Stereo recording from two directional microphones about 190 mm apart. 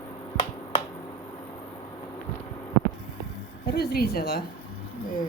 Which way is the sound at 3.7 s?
55° left (ahead or behind).